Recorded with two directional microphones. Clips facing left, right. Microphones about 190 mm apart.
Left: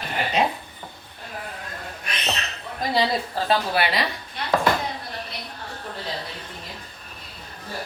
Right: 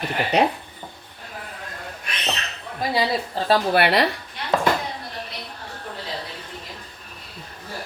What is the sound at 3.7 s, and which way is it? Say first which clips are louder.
Speech: right 5 dB; 65° right (ahead or behind).